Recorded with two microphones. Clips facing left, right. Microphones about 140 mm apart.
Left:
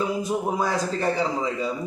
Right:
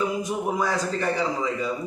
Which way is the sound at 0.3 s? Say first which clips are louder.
Left 1 dB; 30° left (ahead or behind).